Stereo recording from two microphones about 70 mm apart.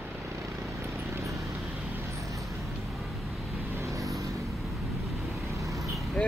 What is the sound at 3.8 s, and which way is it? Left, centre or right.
Vehicle, right.